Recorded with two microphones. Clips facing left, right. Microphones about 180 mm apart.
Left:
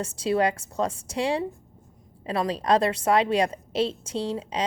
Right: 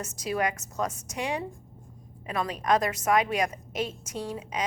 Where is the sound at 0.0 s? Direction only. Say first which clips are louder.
Left 5 dB; 30° left (ahead or behind).